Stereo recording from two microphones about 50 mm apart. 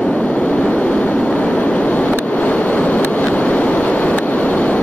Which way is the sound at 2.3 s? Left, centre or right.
Left.